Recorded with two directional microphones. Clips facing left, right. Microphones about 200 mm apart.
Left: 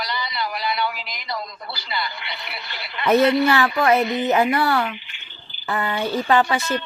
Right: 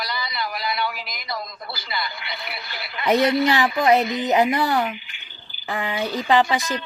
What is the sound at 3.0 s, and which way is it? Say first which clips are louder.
A woman's voice: left 2 dB; 15° right (ahead or behind).